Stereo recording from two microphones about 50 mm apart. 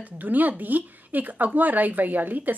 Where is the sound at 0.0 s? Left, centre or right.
Right.